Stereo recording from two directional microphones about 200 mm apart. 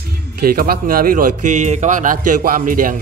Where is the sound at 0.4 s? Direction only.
45° right (ahead or behind).